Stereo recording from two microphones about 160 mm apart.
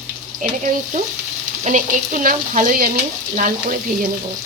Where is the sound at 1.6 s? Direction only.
55° right (ahead or behind).